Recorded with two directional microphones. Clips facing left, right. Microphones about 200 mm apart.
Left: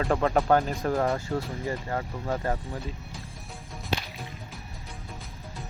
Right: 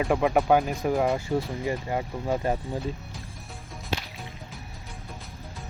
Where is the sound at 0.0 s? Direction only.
10° right (ahead or behind).